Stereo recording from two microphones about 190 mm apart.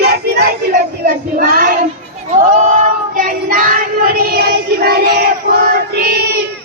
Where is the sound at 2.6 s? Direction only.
40° right (ahead or behind).